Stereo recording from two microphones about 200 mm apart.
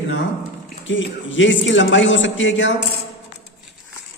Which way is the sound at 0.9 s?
70° left (ahead or behind).